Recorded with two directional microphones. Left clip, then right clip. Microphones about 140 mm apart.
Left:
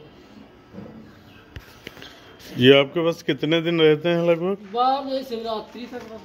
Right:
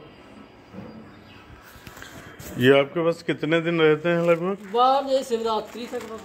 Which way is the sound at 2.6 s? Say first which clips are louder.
Left 3 dB; 35° left (ahead or behind).